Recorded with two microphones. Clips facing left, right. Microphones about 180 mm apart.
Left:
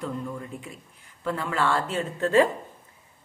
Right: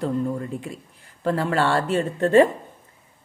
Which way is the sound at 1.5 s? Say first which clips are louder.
Right 2 dB; 30° right (ahead or behind).